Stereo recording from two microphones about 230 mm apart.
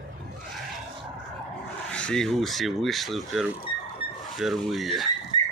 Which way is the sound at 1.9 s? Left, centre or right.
Centre.